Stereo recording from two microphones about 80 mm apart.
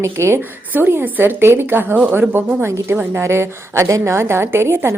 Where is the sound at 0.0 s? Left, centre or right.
Right.